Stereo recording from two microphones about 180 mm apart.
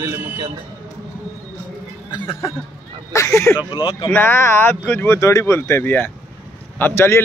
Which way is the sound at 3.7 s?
25° left (ahead or behind).